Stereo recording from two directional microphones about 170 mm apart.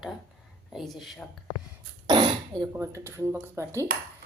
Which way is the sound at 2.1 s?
25° right (ahead or behind).